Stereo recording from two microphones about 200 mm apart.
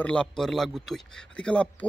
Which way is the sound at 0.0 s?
5° left (ahead or behind).